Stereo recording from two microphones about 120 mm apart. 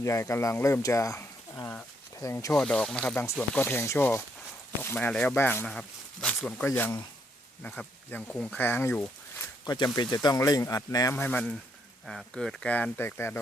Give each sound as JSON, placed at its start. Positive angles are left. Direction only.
{"t": 0.0, "sound": "speech", "side_deg": 25}
{"t": 2.5, "sound": "speech", "side_deg": 5}
{"t": 3.6, "sound": "speech", "side_deg": 20}
{"t": 9.6, "sound": "speech", "side_deg": 35}
{"t": 11.2, "sound": "speech", "side_deg": 10}